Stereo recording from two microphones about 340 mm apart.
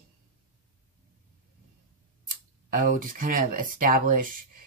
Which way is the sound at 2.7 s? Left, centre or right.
Right.